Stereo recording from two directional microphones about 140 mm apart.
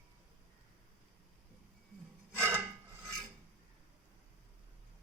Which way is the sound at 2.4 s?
15° right (ahead or behind).